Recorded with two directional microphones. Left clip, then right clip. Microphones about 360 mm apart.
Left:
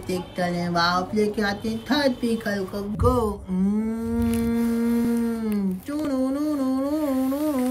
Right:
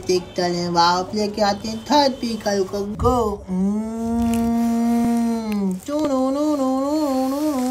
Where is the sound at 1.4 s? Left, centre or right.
Centre.